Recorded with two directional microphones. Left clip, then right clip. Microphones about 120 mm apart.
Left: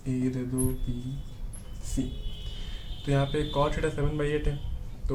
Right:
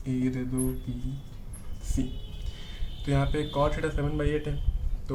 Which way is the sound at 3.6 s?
20° left (ahead or behind).